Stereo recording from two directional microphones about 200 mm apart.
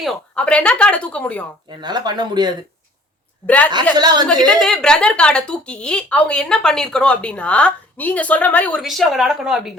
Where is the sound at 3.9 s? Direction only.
20° right (ahead or behind).